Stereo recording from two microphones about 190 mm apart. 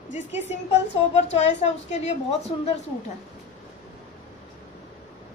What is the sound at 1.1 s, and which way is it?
A woman's voice, 35° left (ahead or behind).